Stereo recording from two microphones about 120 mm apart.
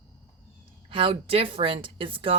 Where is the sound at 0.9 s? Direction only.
50° right (ahead or behind).